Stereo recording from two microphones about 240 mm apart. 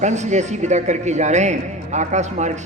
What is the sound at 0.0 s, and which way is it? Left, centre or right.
Speech, right.